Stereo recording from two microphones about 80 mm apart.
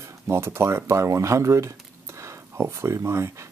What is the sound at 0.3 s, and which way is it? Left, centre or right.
Speech, right.